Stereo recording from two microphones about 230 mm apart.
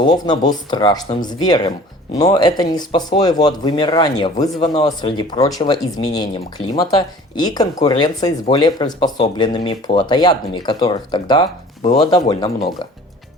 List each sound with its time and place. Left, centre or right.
0.0 s speech: centre